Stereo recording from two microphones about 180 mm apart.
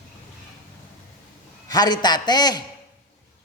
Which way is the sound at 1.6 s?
20° left (ahead or behind).